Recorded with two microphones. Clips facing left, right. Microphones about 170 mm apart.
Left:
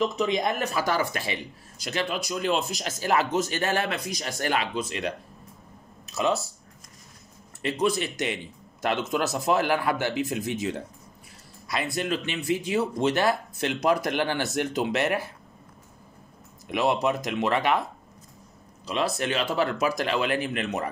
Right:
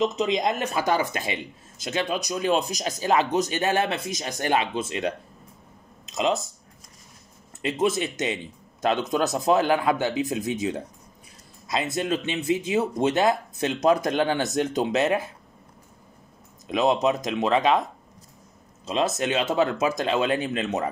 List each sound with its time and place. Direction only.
0.2 s speech: 20° right (ahead or behind)
7.6 s speech: 20° right (ahead or behind)
16.6 s speech: 20° right (ahead or behind)
18.9 s speech: 25° right (ahead or behind)